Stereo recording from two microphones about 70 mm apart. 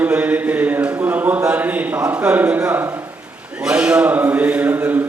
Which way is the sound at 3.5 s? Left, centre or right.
Centre.